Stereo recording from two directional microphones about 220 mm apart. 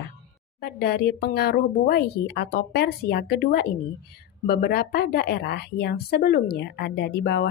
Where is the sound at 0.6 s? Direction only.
45° left (ahead or behind).